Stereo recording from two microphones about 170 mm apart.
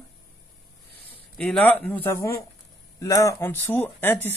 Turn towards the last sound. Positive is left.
turn(degrees=10)  # may be behind; listen again after turning